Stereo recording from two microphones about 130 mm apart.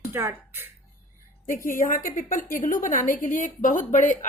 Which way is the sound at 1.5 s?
90° left.